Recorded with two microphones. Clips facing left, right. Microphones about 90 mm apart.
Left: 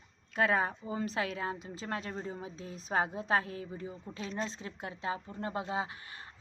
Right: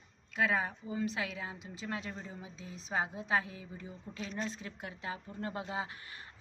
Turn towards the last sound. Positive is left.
turn(degrees=25)  # may be behind; listen again after turning